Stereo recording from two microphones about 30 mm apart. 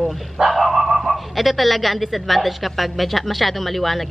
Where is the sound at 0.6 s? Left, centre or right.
Centre.